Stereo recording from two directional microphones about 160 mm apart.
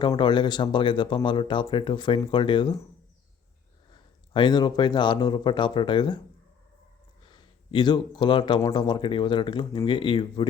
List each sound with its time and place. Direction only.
0.0 s speech: 30° left (ahead or behind)
4.4 s speech: 30° left (ahead or behind)
7.3 s speech: 30° left (ahead or behind)